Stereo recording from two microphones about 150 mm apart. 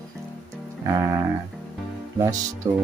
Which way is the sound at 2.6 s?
15° right (ahead or behind).